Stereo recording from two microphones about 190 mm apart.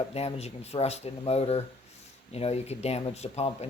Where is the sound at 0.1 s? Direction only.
35° left (ahead or behind).